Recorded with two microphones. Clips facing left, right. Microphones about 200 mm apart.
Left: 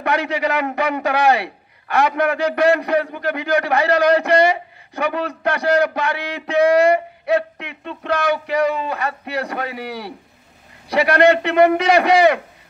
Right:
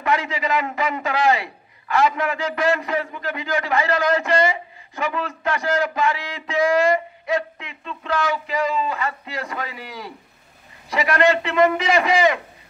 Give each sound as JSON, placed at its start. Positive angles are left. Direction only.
{"t": 0.0, "sound": "a man's voice", "side_deg": 65}